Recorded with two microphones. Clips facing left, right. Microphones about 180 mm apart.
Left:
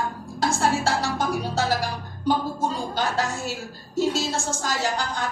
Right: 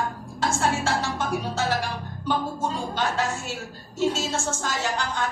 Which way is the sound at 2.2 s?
35° left (ahead or behind).